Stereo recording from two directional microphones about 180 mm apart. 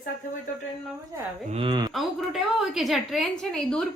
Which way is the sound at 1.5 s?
30° right (ahead or behind).